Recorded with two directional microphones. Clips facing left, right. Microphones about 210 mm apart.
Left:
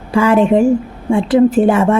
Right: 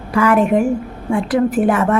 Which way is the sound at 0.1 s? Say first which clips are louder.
Left 3 dB; 25° left (ahead or behind).